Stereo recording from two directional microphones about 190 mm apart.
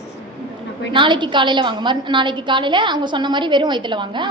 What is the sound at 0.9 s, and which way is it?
A woman's voice, 25° right (ahead or behind).